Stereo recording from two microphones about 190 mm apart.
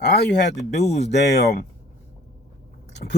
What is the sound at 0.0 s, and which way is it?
Speech, 55° left (ahead or behind).